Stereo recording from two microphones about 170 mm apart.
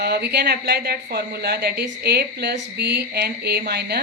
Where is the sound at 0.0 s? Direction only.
70° right (ahead or behind).